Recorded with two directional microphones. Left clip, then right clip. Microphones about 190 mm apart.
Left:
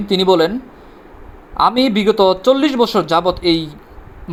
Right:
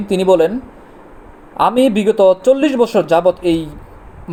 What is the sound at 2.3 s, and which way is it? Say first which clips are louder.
Speech: right 2 dB; 5° right (ahead or behind).